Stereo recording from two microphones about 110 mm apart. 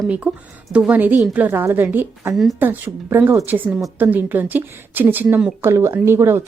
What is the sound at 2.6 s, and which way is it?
A woman's voice, 20° right (ahead or behind).